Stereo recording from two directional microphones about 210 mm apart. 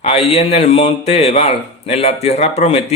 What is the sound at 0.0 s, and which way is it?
A man's voice, 30° left (ahead or behind).